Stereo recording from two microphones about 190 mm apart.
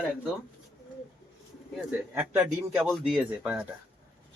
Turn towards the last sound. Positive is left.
turn(degrees=-5)  # may be behind; listen again after turning